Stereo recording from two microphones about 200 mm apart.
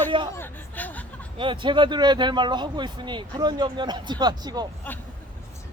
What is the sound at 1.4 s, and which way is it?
Speech, 25° right (ahead or behind).